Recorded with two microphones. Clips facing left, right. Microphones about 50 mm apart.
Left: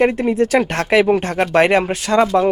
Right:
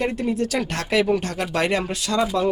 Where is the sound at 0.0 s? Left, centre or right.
Left.